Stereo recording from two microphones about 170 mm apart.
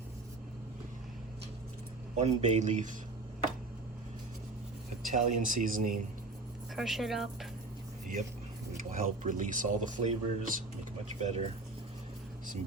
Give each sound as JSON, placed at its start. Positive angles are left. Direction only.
{"t": 2.1, "sound": "speech", "side_deg": -45}
{"t": 5.1, "sound": "speech", "side_deg": -50}
{"t": 6.7, "sound": "speech", "side_deg": 0}
{"t": 8.8, "sound": "speech", "side_deg": -50}
{"t": 11.2, "sound": "speech", "side_deg": -40}